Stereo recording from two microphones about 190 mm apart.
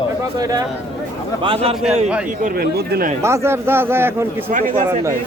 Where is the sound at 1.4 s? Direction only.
30° right (ahead or behind).